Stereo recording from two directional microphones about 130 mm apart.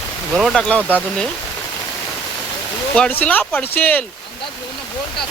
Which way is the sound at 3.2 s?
10° left (ahead or behind).